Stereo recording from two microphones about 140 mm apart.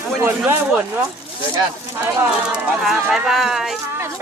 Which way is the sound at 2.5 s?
5° right (ahead or behind).